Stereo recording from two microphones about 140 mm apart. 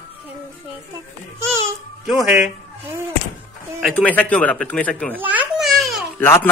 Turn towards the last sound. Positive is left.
turn(degrees=15)  # may be behind; listen again after turning